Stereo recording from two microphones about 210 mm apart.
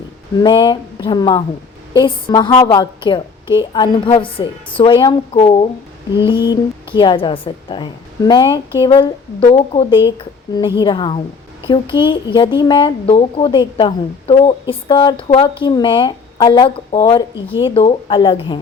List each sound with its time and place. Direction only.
0.4 s speech: 20° left (ahead or behind)